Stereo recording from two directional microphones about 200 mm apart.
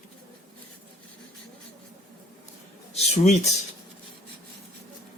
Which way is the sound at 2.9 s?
30° left (ahead or behind).